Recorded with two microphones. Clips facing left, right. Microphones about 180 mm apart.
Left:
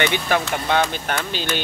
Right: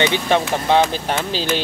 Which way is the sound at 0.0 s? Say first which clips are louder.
Right 3 dB; 25° right (ahead or behind).